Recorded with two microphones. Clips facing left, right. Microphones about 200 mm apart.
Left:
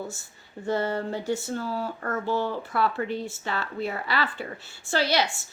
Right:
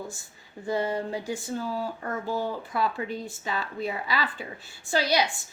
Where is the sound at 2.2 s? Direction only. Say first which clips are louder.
Left 3 dB; 40° right (ahead or behind).